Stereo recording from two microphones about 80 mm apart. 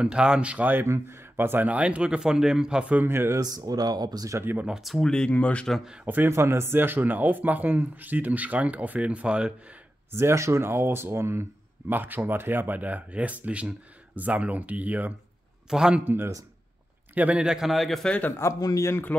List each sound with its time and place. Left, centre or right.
0.0 s speech: centre
0.8 s speech: right; by 3.1 s centre
3.1 s speech: right
3.3 s speech: right
4.4 s speech: right
4.6 s speech: centre
6.0 s speech: right
10.1 s speech: right; by 15.1 s centre
15.7 s speech: centre
16.0 s speech: right; by 18.1 s centre
18.3 s a man's voice: left
18.6 s a man's voice: left